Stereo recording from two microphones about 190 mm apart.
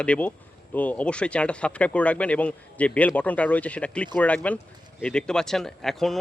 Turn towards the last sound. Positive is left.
turn(degrees=0)  # may be behind; listen again after turning